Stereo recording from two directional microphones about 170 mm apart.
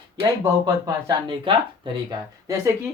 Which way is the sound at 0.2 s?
20° right (ahead or behind).